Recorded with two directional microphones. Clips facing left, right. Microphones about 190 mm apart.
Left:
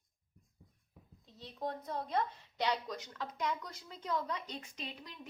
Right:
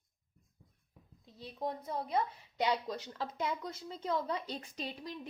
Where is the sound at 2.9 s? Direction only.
30° right (ahead or behind).